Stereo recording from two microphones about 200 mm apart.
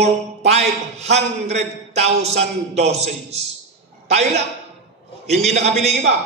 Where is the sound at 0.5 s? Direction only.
35° right (ahead or behind).